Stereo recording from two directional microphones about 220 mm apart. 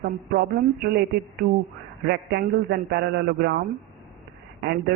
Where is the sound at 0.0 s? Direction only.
45° right (ahead or behind).